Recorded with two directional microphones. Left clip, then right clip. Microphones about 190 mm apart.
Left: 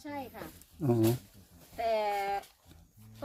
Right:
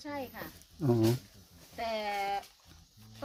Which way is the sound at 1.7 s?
10° right (ahead or behind).